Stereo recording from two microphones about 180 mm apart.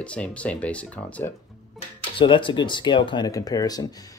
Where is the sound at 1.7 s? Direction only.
30° left (ahead or behind).